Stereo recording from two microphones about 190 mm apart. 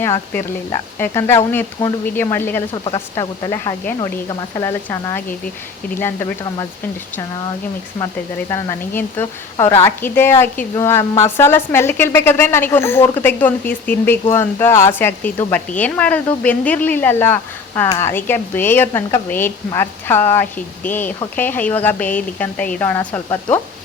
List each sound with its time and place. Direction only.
0.0 s a woman's voice: 15° left (ahead or behind)
2.8 s a woman's voice: 25° left (ahead or behind)
8.4 s a woman's voice: 15° left (ahead or behind)